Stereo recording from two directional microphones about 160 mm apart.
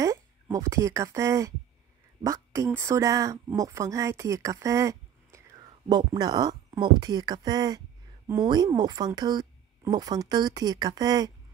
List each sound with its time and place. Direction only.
0.0 s a woman's voice: 20° right (ahead or behind)